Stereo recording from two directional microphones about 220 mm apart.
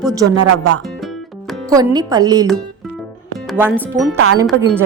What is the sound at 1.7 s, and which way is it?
Speech, 15° right (ahead or behind).